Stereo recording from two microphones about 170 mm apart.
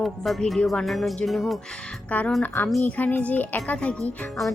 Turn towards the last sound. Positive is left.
turn(degrees=5)  # may be behind; listen again after turning